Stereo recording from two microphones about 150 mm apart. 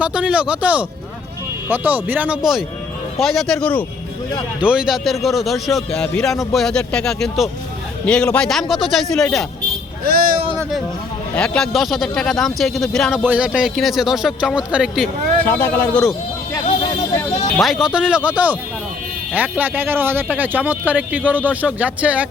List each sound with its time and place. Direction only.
0.0 s speech: 5° right (ahead or behind); by 3.8 s 10° left (ahead or behind)
4.6 s speech: 5° right (ahead or behind)
10.0 s speech: 85° right
11.3 s speech: 5° left (ahead or behind)
15.4 s speech: 15° left (ahead or behind)
17.6 s speech: centre (ahead or behind)